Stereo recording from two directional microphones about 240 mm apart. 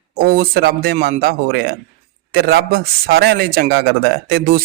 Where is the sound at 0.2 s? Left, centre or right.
Right.